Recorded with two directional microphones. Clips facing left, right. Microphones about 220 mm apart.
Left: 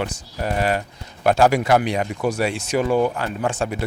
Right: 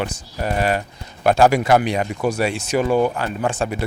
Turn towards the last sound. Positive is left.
turn(degrees=-15)  # may be behind; listen again after turning